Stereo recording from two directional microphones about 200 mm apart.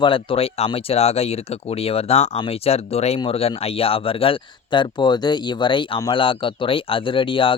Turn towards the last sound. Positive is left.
turn(degrees=25)  # may be behind; listen again after turning